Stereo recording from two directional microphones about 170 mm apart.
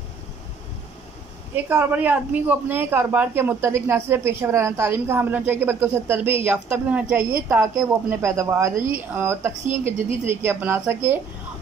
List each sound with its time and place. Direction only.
1.5 s speech: 10° right (ahead or behind)